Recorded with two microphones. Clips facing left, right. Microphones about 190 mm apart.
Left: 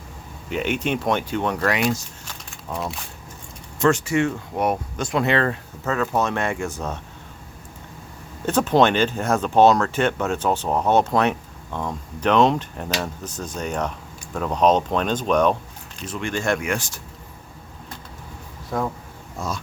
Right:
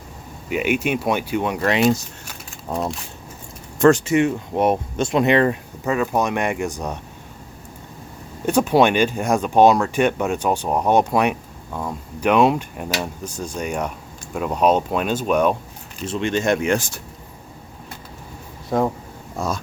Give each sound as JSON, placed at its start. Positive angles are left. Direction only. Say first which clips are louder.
{"t": 0.5, "sound": "speech", "louder": "right 3 dB", "side_deg": -10}
{"t": 2.6, "sound": "speech", "louder": "right 4 dB", "side_deg": -35}
{"t": 3.9, "sound": "speech", "louder": "right 3 dB", "side_deg": -20}
{"t": 8.4, "sound": "speech", "louder": "right 2 dB", "side_deg": -10}
{"t": 16.0, "sound": "speech", "louder": "right 4 dB", "side_deg": -20}
{"t": 18.7, "sound": "speech", "louder": "right 5 dB", "side_deg": -30}